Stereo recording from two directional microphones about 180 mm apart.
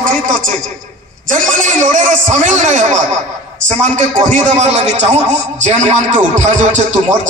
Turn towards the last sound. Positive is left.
turn(degrees=-40)  # may be behind; listen again after turning